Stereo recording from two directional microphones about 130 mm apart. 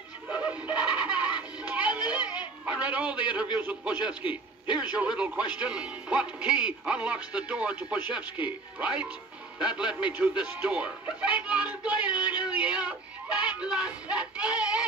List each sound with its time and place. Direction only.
0.3 s music: 10° right (ahead or behind)
3.5 s a man's voice: 10° right (ahead or behind)
12.1 s a sound: 35° left (ahead or behind)
12.5 s speech: 10° right (ahead or behind)